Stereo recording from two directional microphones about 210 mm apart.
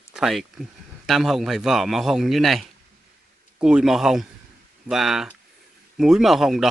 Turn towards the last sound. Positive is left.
turn(degrees=0)  # may be behind; listen again after turning